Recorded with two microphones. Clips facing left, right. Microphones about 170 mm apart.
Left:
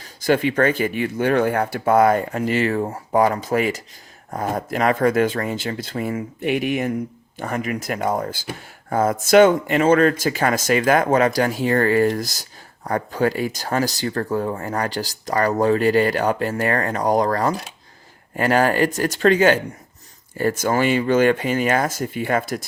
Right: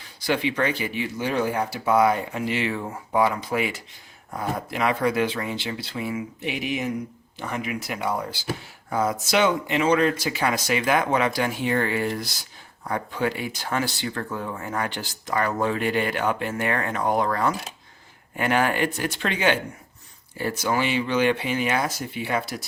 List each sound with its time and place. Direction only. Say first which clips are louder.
0.0 s speech: left 6 dB; 45° left (ahead or behind)